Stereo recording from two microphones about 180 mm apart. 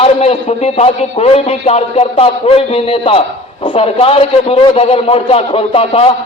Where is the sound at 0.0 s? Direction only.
35° left (ahead or behind).